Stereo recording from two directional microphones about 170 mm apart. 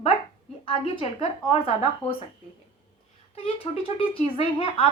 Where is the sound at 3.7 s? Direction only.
35° left (ahead or behind).